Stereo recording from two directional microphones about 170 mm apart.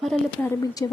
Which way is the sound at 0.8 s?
20° left (ahead or behind).